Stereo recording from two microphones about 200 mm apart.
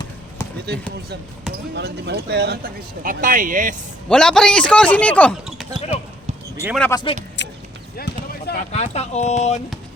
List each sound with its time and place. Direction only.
0.5 s speech: 55° right (ahead or behind)
4.1 s a man's voice: 5° left (ahead or behind)
6.9 s speech: 25° left (ahead or behind)
7.4 s a sound: 60° left (ahead or behind)
7.9 s a sound: 50° left (ahead or behind)
8.7 s speech: 35° left (ahead or behind)